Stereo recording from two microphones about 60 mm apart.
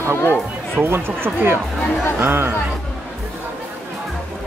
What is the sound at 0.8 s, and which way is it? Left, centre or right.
Speech, right.